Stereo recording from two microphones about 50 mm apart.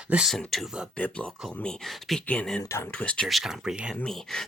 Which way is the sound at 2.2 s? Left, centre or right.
Left.